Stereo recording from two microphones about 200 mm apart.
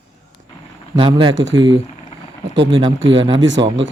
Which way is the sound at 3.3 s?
65° right (ahead or behind).